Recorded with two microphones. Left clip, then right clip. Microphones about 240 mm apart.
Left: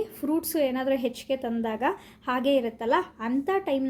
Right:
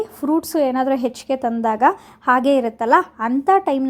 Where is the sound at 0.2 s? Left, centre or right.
Centre.